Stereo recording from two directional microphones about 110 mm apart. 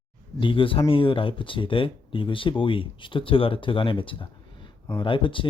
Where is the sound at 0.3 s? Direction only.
50° left (ahead or behind).